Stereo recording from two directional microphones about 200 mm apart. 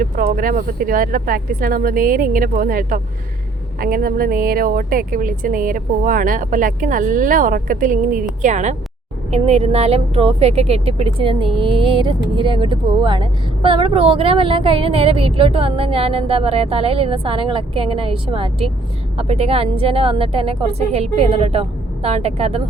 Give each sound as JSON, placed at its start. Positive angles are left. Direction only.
{"t": 0.0, "sound": "a woman's voice", "side_deg": -45}